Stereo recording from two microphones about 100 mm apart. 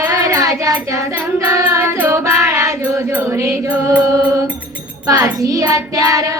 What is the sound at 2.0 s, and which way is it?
Music, 25° right (ahead or behind).